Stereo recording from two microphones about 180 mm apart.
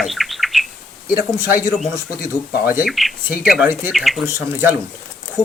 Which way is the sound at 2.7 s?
Centre (ahead or behind).